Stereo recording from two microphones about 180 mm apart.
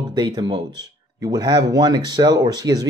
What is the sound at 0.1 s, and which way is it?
Speech, 20° right (ahead or behind).